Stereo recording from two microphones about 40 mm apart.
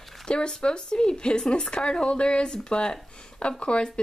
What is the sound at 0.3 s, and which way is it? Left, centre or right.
Speech, left.